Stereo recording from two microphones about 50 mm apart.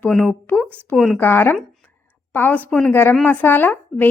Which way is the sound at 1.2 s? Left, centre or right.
Left.